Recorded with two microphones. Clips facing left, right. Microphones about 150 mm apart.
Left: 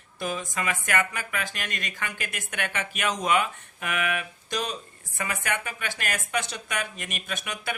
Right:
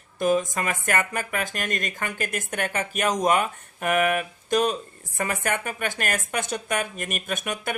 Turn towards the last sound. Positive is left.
turn(degrees=-50)  # may be behind; listen again after turning